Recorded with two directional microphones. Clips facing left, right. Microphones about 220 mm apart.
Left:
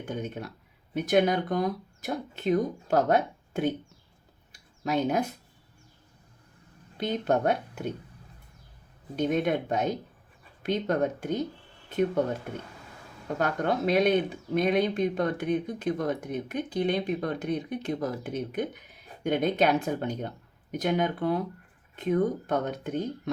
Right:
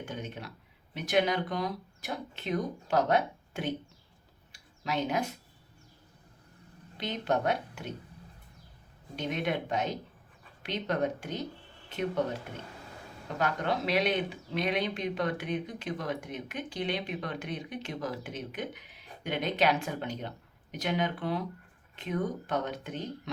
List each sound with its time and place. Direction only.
0.1 s speech: 50° left (ahead or behind)
4.8 s speech: 45° left (ahead or behind)
6.9 s speech: 50° left (ahead or behind)
9.1 s speech: 50° left (ahead or behind)
13.2 s speech: 45° left (ahead or behind)